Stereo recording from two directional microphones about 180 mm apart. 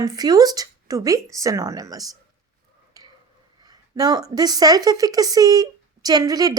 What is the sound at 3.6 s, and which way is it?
A woman's voice, 20° right (ahead or behind).